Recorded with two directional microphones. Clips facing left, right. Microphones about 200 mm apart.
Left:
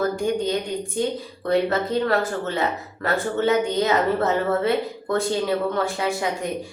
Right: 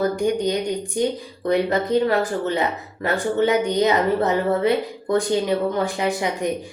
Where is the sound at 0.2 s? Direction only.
15° right (ahead or behind).